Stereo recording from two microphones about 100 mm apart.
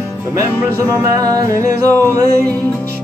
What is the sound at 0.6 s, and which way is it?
Music, 30° right (ahead or behind).